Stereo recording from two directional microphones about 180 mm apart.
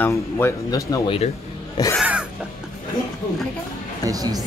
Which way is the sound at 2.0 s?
5° right (ahead or behind).